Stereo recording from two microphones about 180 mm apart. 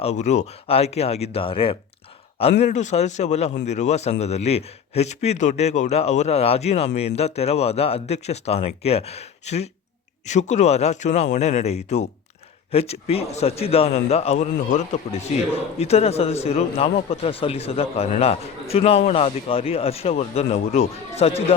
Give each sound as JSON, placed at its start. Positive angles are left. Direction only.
{"t": 0.0, "sound": "speech", "side_deg": 40}